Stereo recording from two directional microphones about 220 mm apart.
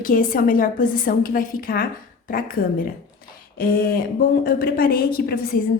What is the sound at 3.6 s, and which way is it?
A woman's voice, 40° left (ahead or behind).